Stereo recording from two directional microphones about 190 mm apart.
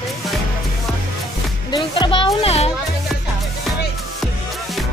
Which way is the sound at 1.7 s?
25° left (ahead or behind).